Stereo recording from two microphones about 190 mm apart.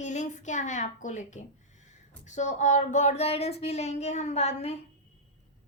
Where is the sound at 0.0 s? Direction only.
40° left (ahead or behind).